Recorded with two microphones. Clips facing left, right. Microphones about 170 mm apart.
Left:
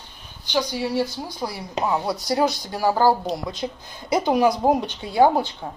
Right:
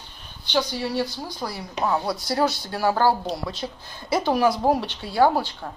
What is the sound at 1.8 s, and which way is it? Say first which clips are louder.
Speech: left 1 dB; 20° left (ahead or behind).